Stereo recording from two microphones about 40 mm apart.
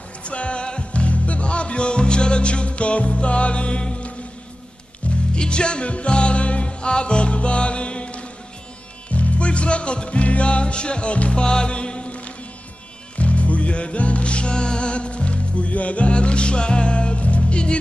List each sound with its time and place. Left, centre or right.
0.2 s music: left
5.3 s music: left